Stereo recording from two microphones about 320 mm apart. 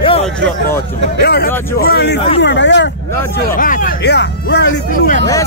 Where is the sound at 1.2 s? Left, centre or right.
Left.